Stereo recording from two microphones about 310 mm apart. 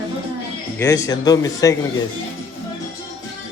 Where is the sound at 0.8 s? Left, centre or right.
Centre.